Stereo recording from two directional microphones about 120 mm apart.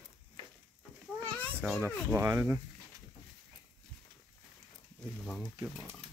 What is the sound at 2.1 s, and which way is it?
Speech, 20° right (ahead or behind).